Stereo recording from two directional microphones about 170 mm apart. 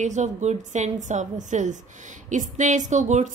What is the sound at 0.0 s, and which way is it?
A woman's voice, 45° right (ahead or behind).